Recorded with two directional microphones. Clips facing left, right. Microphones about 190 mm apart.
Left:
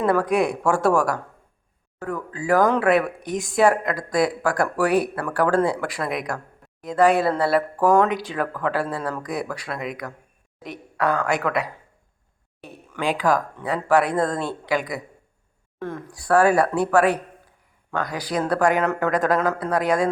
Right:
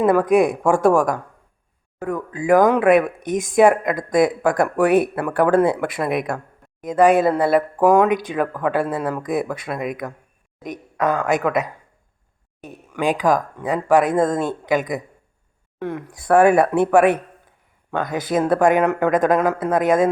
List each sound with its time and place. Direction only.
0.0 s speech: 20° right (ahead or behind)
12.9 s speech: 15° right (ahead or behind)